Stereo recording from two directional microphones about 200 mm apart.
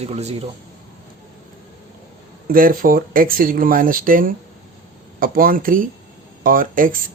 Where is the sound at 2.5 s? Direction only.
45° right (ahead or behind).